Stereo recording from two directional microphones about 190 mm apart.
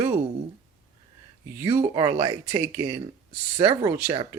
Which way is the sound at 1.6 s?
30° right (ahead or behind).